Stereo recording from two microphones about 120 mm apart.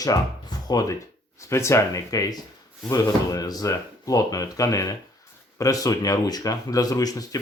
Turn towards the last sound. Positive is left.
turn(degrees=30)  # may be behind; listen again after turning